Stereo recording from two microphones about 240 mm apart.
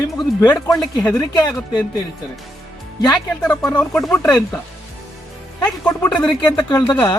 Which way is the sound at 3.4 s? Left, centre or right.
Centre.